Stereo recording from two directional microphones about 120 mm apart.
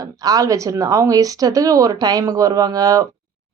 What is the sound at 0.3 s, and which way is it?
Speech, 30° right (ahead or behind).